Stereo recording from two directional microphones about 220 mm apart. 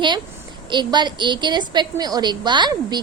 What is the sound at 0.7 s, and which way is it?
A woman's voice, 20° right (ahead or behind).